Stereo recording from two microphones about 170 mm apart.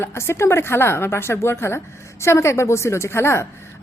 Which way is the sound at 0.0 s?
15° left (ahead or behind).